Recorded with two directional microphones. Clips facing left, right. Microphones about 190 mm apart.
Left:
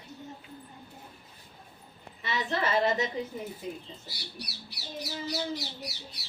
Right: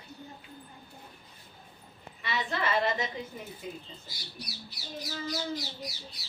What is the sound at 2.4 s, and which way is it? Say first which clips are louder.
Speech: left 3 dB; 40° left (ahead or behind).